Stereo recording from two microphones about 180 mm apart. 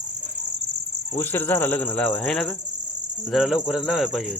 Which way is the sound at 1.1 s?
10° left (ahead or behind).